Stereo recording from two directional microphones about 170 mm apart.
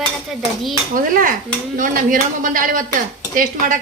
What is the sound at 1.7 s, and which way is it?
Speech, 50° right (ahead or behind).